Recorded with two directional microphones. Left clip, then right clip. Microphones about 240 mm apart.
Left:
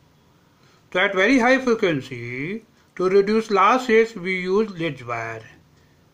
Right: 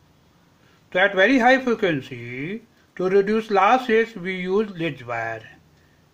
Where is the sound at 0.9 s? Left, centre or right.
Centre.